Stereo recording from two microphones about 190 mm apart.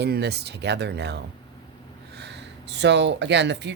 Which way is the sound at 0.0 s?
60° right (ahead or behind).